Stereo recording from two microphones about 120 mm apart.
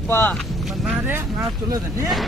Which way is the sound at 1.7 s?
30° right (ahead or behind).